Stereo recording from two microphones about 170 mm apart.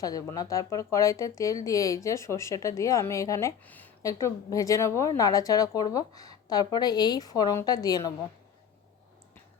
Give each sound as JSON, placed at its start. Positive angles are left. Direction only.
{"t": 0.0, "sound": "speech", "side_deg": 20}